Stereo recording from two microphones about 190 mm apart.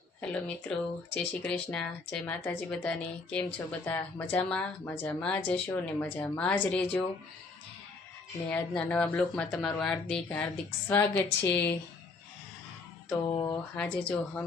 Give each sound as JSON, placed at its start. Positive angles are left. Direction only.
{"t": 0.2, "sound": "speech", "side_deg": 5}
{"t": 8.4, "sound": "speech", "side_deg": 5}
{"t": 13.2, "sound": "speech", "side_deg": 15}